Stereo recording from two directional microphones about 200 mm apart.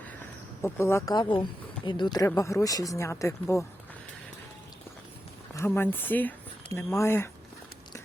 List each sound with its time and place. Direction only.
0.6 s speech: 15° left (ahead or behind)
5.5 s speech: 10° left (ahead or behind)